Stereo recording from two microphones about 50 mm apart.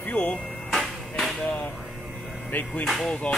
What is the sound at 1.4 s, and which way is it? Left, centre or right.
Speech, left.